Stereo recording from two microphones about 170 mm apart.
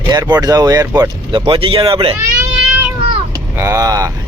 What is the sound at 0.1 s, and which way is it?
Speech, 25° right (ahead or behind).